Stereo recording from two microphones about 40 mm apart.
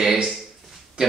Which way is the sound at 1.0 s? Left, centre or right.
Right.